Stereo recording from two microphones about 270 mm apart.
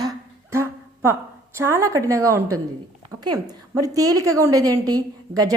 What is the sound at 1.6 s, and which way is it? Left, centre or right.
Speech, centre.